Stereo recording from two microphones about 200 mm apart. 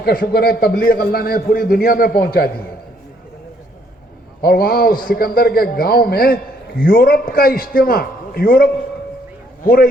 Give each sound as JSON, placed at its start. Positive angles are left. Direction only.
{"t": 0.0, "sound": "a man's voice", "side_deg": 50}
{"t": 4.4, "sound": "a man's voice", "side_deg": 50}